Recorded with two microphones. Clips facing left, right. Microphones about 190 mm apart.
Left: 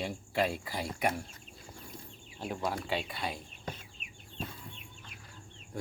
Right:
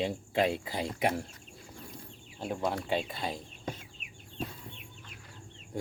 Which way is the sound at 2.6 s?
25° right (ahead or behind).